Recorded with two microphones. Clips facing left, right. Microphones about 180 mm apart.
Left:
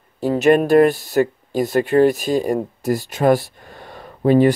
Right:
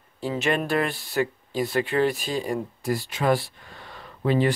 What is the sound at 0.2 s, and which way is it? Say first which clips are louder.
Speech: left 11 dB; 45° left (ahead or behind).